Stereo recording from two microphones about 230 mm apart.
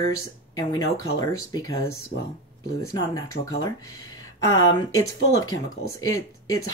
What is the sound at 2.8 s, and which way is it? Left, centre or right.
Speech, centre.